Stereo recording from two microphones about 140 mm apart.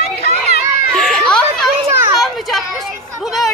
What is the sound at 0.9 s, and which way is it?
Children playing, 5° left (ahead or behind).